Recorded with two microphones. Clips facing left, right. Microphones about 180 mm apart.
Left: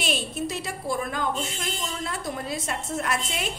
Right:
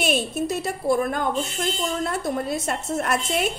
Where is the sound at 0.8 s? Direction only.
55° right (ahead or behind).